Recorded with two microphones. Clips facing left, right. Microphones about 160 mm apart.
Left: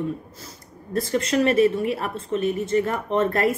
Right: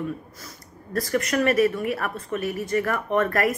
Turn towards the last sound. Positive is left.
turn(degrees=25)  # may be behind; listen again after turning